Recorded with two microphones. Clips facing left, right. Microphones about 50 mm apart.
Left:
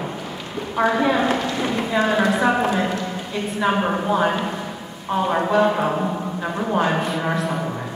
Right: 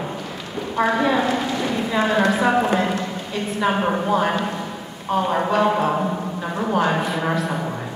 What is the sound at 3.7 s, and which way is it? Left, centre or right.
Speech, centre.